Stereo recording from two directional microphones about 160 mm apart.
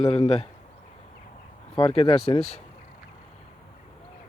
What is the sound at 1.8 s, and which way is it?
Speech, 30° left (ahead or behind).